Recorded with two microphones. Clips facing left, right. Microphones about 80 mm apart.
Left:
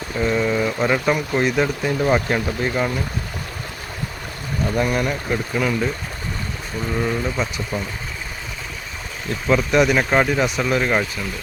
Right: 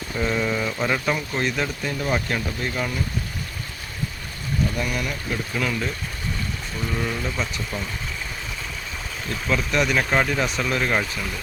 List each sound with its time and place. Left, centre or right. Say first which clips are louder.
0.2 s speech: left 4 dB; centre; by 2.9 s left
4.8 s speech: left 6 dB; left
5.5 s speech: left 5 dB; centre
6.9 s speech: left 5 dB; centre
9.5 s speech: left 6 dB; centre